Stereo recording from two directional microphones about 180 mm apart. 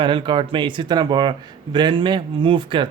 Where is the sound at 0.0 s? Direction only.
25° right (ahead or behind).